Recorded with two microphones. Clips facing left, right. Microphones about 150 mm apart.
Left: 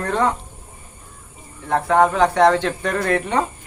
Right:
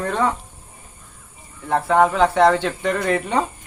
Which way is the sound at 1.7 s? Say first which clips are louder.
Even; 5° right (ahead or behind).